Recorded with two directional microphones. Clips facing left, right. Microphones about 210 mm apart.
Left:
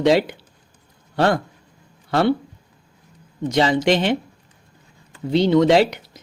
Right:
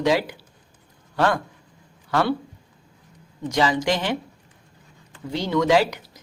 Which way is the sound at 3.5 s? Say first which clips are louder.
Left 4 dB; 25° left (ahead or behind).